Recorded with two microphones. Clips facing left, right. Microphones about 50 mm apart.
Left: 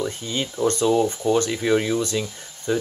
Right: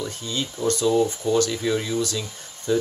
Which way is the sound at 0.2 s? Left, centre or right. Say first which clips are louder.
Left 2 dB; left.